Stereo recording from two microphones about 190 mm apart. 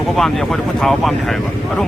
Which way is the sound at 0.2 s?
Centre (ahead or behind).